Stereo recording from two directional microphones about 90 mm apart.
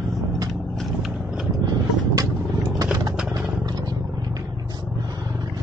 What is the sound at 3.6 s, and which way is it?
Vehicle, 50° right (ahead or behind).